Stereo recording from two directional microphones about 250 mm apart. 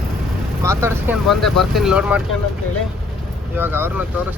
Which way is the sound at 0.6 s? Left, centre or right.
Centre.